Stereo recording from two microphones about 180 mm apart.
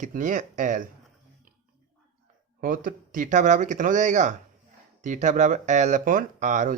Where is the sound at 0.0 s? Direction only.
45° right (ahead or behind).